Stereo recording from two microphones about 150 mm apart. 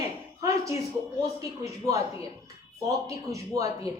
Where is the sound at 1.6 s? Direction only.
20° right (ahead or behind).